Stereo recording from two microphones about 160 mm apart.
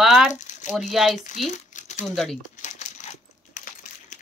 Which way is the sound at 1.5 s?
50° left (ahead or behind).